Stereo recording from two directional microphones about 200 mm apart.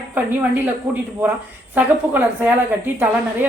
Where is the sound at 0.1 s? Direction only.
10° right (ahead or behind).